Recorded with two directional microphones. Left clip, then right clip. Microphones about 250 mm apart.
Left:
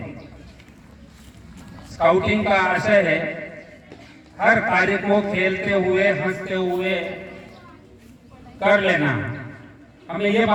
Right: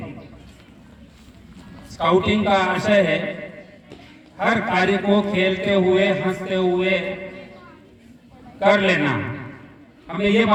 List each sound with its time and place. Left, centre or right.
2.0 s a man's voice: right
4.4 s a man's voice: right
8.7 s a man's voice: right
10.1 s a man's voice: centre